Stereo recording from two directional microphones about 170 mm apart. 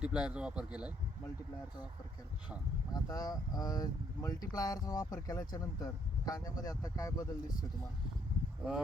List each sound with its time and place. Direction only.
0.0 s speech: 5° right (ahead or behind)
2.9 s speech: 20° left (ahead or behind)